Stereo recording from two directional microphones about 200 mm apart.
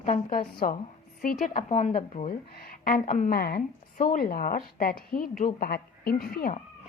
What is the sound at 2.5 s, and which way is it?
A woman's voice, 50° left (ahead or behind).